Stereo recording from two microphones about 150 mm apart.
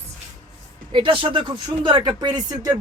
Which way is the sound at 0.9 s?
35° right (ahead or behind).